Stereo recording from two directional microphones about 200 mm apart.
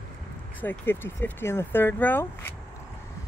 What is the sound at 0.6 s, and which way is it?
Speech, 10° left (ahead or behind).